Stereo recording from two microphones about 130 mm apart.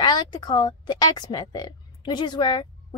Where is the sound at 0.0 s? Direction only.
30° left (ahead or behind).